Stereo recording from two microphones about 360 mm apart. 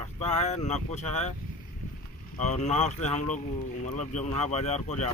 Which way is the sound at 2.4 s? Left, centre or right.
Centre.